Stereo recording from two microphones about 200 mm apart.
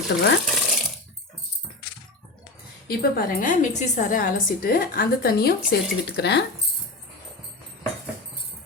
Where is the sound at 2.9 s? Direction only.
45° left (ahead or behind).